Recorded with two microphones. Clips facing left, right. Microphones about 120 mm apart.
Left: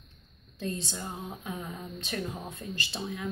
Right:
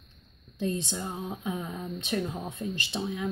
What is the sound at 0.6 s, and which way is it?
Speech, 20° right (ahead or behind).